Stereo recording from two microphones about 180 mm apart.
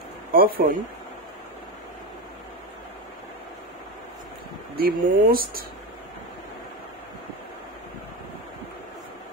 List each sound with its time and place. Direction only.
0.3 s speech: 55° right (ahead or behind)
4.7 s speech: 55° right (ahead or behind)